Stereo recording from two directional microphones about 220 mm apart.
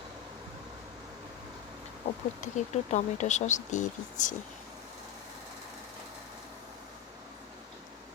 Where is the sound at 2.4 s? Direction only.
35° left (ahead or behind).